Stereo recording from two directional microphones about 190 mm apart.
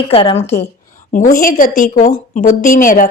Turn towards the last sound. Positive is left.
turn(degrees=45)  # may be behind; listen again after turning